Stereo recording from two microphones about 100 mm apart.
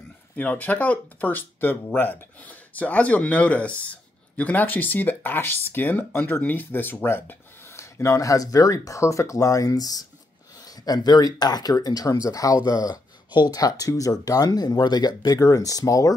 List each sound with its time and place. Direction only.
0.4 s speech: 15° left (ahead or behind); by 16.2 s 35° left (ahead or behind)